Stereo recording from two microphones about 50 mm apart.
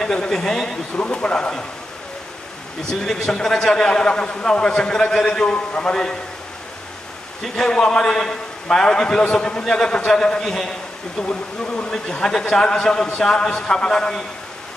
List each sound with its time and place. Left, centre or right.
0.0 s a man's voice: centre
2.9 s a man's voice: centre
7.4 s a man's voice: centre
11.2 s a man's voice: left